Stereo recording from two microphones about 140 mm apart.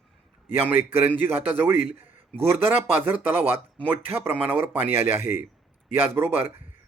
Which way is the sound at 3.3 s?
15° right (ahead or behind).